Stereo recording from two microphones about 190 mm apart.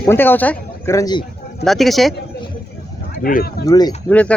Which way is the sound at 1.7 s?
Centre (ahead or behind).